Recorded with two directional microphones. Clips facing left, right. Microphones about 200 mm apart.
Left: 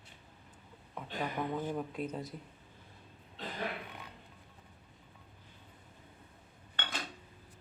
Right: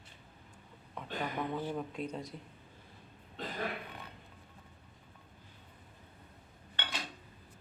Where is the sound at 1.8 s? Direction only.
5° left (ahead or behind).